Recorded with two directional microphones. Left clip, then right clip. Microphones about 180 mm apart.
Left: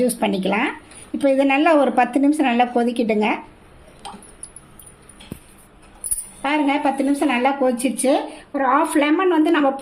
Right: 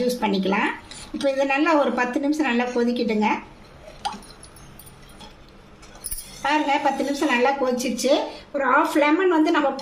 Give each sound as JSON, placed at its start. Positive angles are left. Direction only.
{"t": 0.2, "sound": "a woman's voice", "side_deg": 45}
{"t": 6.4, "sound": "a woman's voice", "side_deg": 45}